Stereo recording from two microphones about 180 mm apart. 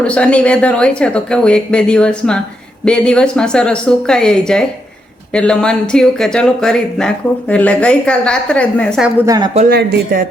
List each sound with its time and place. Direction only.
0.0 s speech: 5° left (ahead or behind)
9.2 s speech: 20° right (ahead or behind)
9.6 s speech: 55° right (ahead or behind)